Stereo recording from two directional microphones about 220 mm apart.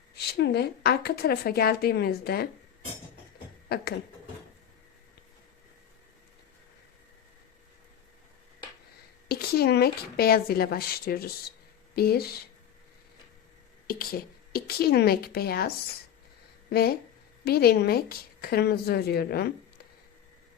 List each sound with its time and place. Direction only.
0.2 s a woman's voice: 50° left (ahead or behind)
3.7 s a woman's voice: 45° left (ahead or behind)
9.3 s a woman's voice: 45° left (ahead or behind)
13.8 s a woman's voice: 40° left (ahead or behind)